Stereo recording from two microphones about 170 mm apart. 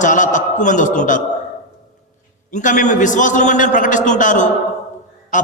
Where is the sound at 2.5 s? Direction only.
45° left (ahead or behind).